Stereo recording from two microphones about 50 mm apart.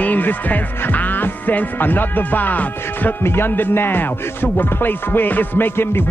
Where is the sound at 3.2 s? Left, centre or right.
Left.